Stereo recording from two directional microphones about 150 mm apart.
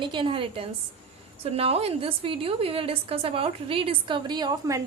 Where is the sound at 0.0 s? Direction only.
30° right (ahead or behind).